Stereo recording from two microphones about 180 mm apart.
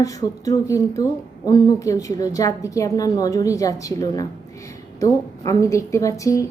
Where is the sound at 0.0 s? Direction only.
20° left (ahead or behind).